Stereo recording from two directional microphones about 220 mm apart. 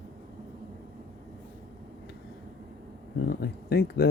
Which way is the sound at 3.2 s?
45° left (ahead or behind).